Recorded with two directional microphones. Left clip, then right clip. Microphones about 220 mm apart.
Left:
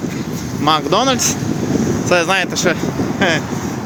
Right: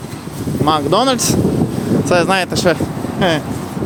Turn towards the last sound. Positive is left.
turn(degrees=-5)  # may be behind; listen again after turning